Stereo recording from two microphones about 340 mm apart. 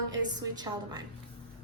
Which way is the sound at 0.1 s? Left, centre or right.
Centre.